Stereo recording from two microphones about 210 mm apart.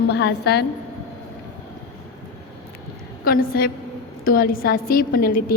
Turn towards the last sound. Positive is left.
turn(degrees=45)  # may be behind; listen again after turning